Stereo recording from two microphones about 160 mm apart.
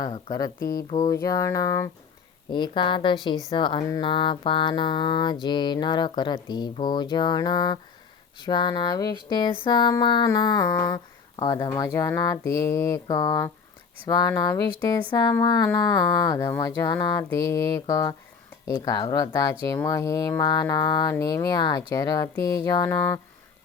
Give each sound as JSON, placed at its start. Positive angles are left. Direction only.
{"t": 0.0, "sound": "speech", "side_deg": 25}